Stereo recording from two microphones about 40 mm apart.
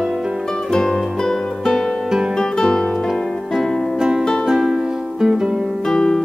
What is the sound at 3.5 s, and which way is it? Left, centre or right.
Music, centre.